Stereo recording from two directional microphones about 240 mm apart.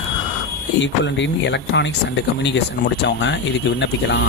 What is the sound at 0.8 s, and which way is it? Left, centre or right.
Speech, left.